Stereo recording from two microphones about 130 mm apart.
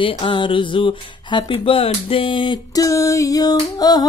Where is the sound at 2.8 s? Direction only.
25° left (ahead or behind).